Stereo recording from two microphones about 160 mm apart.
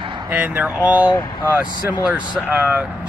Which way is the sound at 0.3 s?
10° right (ahead or behind).